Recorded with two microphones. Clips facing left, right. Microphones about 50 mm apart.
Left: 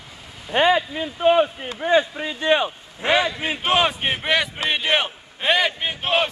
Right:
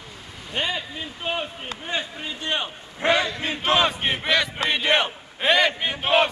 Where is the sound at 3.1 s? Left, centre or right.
Centre.